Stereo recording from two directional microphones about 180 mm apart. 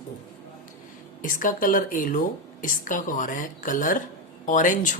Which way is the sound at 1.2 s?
45° left (ahead or behind).